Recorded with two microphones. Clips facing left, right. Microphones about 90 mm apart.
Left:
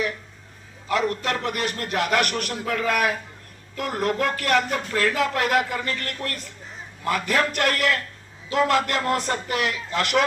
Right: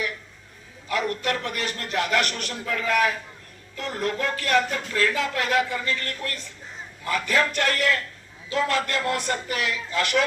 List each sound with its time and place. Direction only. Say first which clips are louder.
0.9 s a man's voice: left 2 dB; 35° left (ahead or behind)
8.4 s speech: left 4 dB; 35° left (ahead or behind)